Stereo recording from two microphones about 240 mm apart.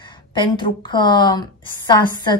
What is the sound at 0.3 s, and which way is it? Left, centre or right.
A woman's voice, centre.